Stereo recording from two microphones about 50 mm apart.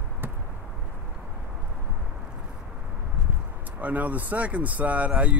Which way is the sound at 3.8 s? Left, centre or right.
Right.